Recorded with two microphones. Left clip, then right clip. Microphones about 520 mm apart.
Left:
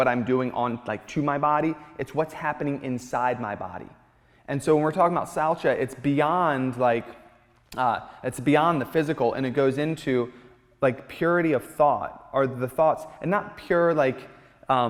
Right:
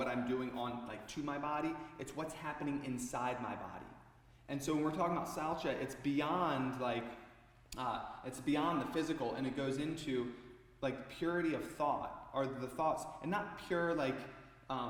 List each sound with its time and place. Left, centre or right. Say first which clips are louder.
0.0 s a man's voice: left 15 dB; left